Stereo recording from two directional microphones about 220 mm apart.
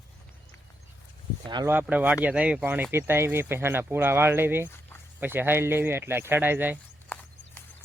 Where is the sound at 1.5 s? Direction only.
20° right (ahead or behind).